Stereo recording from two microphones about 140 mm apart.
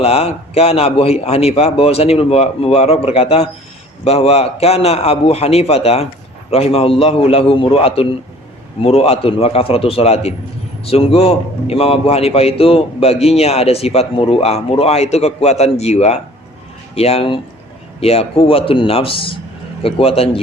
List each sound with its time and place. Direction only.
0.0 s a man's voice: 45° left (ahead or behind)